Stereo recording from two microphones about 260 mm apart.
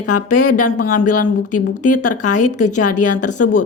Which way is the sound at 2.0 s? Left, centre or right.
Left.